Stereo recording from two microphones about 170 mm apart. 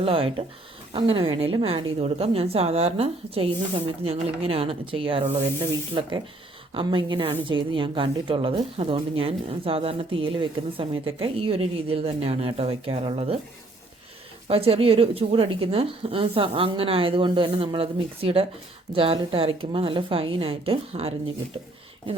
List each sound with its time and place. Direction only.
0.0 s speech: 35° right (ahead or behind)
14.4 s speech: 35° right (ahead or behind)